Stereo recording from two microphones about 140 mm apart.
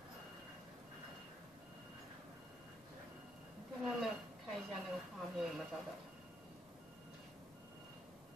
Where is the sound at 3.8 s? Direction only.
Centre (ahead or behind).